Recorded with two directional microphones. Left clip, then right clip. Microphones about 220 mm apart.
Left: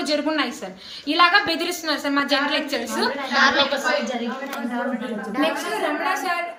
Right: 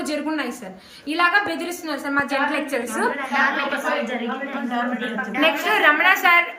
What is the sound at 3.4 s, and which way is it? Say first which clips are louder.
Speech: left 4 dB; 35° left (ahead or behind).